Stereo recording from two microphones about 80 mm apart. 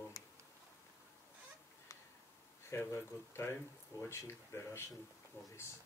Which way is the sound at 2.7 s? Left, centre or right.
Left.